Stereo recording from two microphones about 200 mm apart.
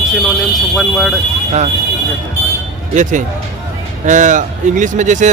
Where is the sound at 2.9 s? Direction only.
40° right (ahead or behind).